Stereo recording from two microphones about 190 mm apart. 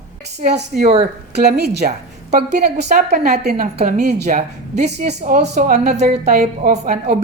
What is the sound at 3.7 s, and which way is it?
A woman's voice, 40° right (ahead or behind).